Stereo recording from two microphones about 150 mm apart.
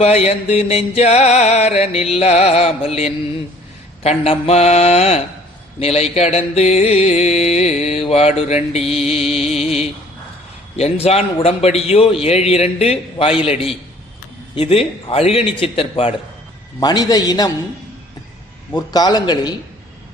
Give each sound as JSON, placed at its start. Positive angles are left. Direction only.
{"t": 0.0, "sound": "a sound", "side_deg": 45}
{"t": 12.2, "sound": "a man's voice", "side_deg": 45}
{"t": 16.8, "sound": "a man's voice", "side_deg": 25}
{"t": 18.7, "sound": "a man's voice", "side_deg": 25}